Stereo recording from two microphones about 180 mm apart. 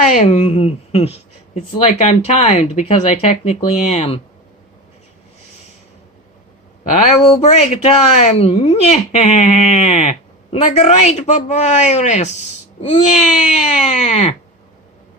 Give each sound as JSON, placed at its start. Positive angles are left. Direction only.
{"t": 0.0, "sound": "speech", "side_deg": 40}
{"t": 7.3, "sound": "speech", "side_deg": 40}